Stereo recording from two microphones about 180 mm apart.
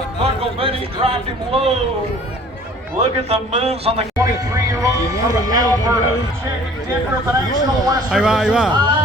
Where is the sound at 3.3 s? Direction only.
35° right (ahead or behind).